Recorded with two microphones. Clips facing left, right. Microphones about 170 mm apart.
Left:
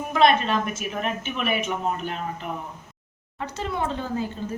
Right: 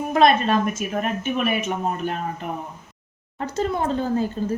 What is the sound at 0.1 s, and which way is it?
A woman's voice, 40° right (ahead or behind).